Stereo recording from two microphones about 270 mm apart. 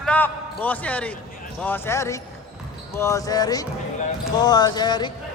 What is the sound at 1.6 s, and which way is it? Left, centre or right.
Speech, centre.